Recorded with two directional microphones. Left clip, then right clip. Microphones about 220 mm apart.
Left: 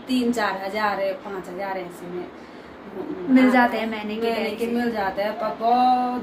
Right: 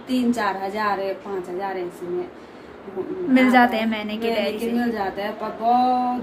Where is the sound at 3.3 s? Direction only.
45° right (ahead or behind).